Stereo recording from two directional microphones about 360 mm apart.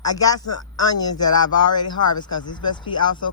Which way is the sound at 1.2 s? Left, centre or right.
Left.